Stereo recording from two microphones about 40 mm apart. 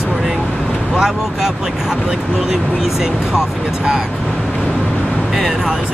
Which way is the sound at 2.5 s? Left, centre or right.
Centre.